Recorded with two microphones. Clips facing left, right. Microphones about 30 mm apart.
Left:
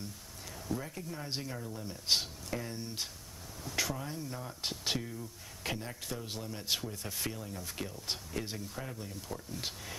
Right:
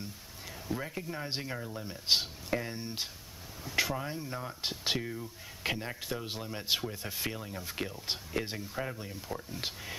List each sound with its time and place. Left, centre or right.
0.7 s speech: right